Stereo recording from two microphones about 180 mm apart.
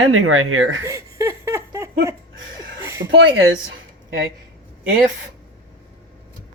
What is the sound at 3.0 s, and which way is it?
Speech, 85° right.